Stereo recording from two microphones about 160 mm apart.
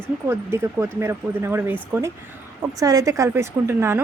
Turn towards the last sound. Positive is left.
turn(degrees=-15)  # may be behind; listen again after turning